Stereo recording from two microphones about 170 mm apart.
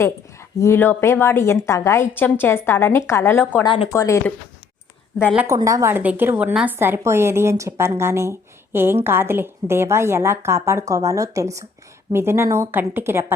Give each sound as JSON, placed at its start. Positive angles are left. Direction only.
{"t": 0.0, "sound": "a woman's voice", "side_deg": 15}
{"t": 5.5, "sound": "speech", "side_deg": -20}